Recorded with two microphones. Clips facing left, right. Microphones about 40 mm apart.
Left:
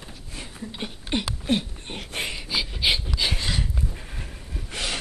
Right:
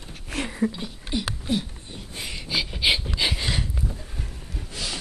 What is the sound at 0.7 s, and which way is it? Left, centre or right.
Speech, left.